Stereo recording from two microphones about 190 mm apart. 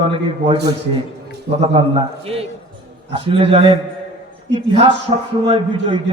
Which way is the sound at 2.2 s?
30° right (ahead or behind).